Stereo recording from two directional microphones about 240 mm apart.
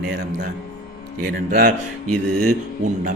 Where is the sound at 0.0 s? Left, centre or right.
Right.